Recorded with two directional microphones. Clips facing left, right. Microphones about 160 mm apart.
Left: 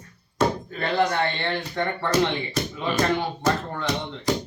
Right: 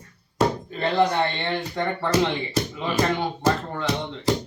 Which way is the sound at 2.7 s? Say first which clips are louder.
Even; 5° right (ahead or behind).